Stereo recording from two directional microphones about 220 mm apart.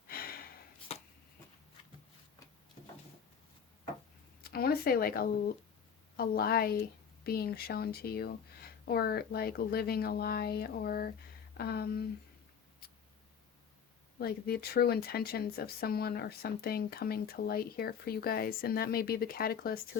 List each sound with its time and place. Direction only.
0.1 s gasp: 40° left (ahead or behind)
4.4 s speech: 45° left (ahead or behind)
14.2 s speech: 45° left (ahead or behind)